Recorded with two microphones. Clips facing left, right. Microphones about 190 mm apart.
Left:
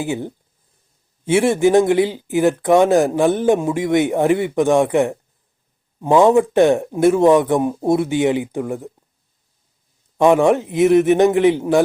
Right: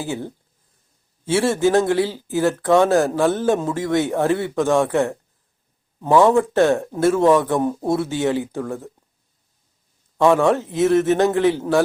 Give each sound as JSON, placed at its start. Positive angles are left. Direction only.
{"t": 0.0, "sound": "speech", "side_deg": 15}
{"t": 10.2, "sound": "speech", "side_deg": 15}